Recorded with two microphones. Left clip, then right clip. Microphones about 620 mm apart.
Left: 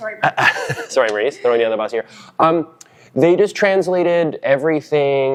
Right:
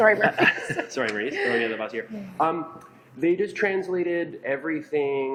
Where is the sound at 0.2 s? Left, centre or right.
Left.